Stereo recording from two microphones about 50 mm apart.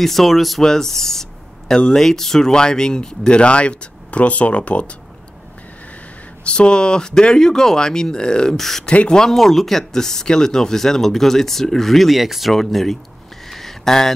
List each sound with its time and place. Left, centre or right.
0.0 s speech: centre; by 4.9 s left
6.4 s speech: left
8.5 s speech: centre
8.9 s speech: left
9.2 s speech: centre
13.5 s a sound: centre